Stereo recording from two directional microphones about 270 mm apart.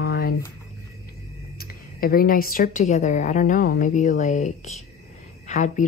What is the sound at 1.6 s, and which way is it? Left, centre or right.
Speech, left.